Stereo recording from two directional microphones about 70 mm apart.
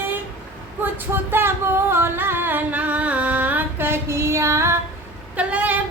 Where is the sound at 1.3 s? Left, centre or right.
Right.